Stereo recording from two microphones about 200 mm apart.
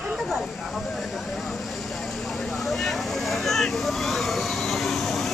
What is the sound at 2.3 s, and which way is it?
Vehicle, centre (ahead or behind).